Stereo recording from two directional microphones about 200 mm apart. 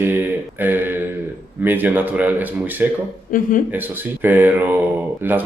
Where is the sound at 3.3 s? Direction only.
40° left (ahead or behind).